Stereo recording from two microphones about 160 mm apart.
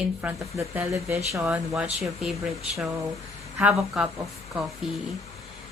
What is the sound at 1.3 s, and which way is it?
A woman's voice, centre (ahead or behind).